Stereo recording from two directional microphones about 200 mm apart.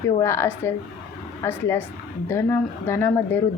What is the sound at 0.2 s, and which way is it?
A woman's voice, 15° left (ahead or behind).